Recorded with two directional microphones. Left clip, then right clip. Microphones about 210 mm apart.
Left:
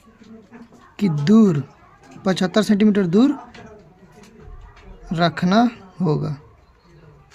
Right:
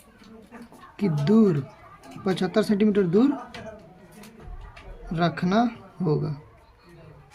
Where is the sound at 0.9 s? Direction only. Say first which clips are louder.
Left 5 dB; 35° left (ahead or behind).